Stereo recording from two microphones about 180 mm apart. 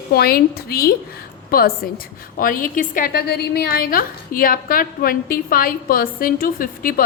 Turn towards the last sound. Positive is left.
turn(degrees=50)  # may be behind; listen again after turning